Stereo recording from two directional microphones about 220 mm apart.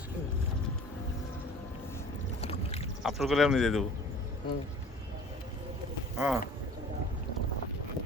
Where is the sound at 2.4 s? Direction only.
25° left (ahead or behind).